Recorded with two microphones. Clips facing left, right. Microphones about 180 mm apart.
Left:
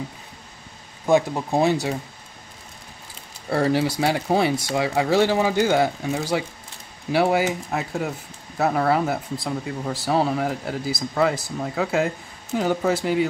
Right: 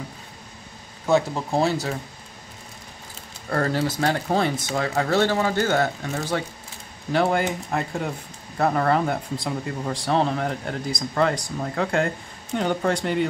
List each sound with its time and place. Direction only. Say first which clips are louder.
1.0 s speech: left 2 dB; 15° left (ahead or behind)
3.4 s speech: left 3 dB; 10° left (ahead or behind)